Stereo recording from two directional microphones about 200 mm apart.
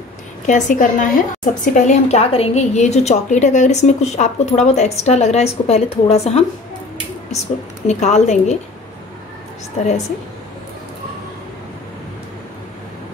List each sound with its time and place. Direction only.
0.5 s a woman's voice: 40° left (ahead or behind)
7.8 s a woman's voice: 35° left (ahead or behind)